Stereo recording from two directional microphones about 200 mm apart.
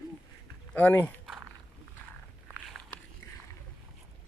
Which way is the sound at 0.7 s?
10° left (ahead or behind).